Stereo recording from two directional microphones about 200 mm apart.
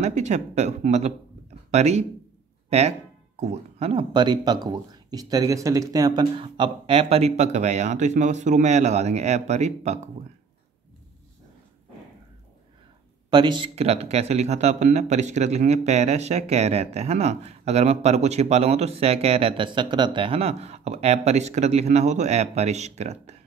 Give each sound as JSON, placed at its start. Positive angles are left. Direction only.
{"t": 0.0, "sound": "speech", "side_deg": -35}
{"t": 13.3, "sound": "speech", "side_deg": -25}